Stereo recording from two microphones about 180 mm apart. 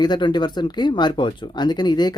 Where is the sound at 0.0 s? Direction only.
25° left (ahead or behind).